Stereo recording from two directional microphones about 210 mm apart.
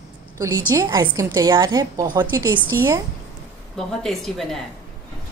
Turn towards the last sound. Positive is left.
turn(degrees=0)  # may be behind; listen again after turning